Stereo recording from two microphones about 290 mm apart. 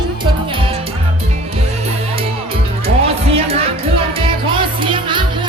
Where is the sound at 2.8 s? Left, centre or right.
Right.